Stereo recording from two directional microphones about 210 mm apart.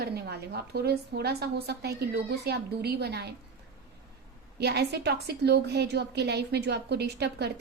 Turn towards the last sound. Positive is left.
turn(degrees=-50)  # may be behind; listen again after turning